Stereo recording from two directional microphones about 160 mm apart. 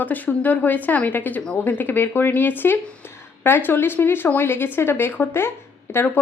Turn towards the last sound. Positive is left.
turn(degrees=15)  # may be behind; listen again after turning